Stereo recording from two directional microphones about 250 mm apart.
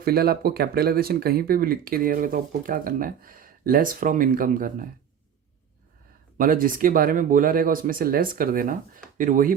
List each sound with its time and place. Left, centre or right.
0.0 s speech: right
6.3 s speech: right